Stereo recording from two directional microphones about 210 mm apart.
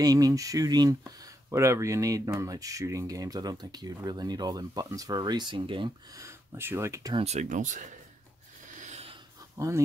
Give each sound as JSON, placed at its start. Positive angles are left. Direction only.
{"t": 0.0, "sound": "speech", "side_deg": -15}
{"t": 7.2, "sound": "speech", "side_deg": -35}
{"t": 8.7, "sound": "a sound", "side_deg": -30}
{"t": 9.6, "sound": "speech", "side_deg": -15}